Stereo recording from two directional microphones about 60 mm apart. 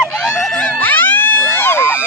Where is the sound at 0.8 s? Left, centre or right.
Left.